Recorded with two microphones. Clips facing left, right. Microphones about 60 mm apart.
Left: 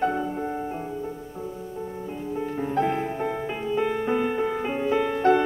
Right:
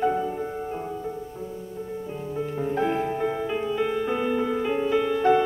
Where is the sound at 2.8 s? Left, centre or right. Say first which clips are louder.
Right 1 dB; centre.